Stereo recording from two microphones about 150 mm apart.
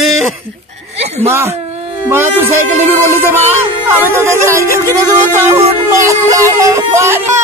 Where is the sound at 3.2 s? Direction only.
15° right (ahead or behind).